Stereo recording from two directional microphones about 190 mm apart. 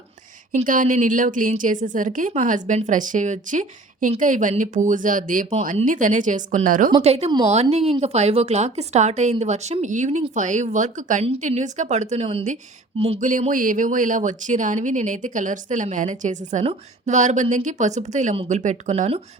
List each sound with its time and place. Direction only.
0.5 s a woman's voice: 45° right (ahead or behind)
7.0 s speech: 35° right (ahead or behind)